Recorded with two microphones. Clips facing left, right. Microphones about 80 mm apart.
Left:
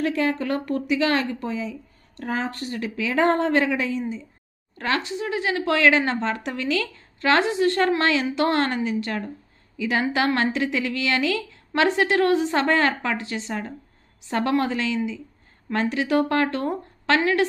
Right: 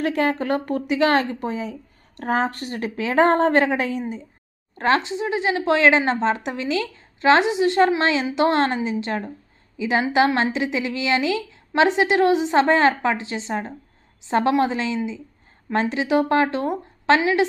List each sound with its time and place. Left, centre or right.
0.0 s a woman's voice: right
4.8 s a woman's voice: right